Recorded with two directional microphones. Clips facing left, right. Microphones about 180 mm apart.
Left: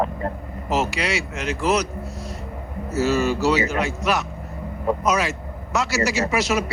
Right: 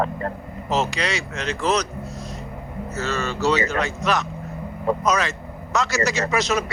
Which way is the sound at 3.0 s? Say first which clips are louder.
Left 6 dB; 10° left (ahead or behind).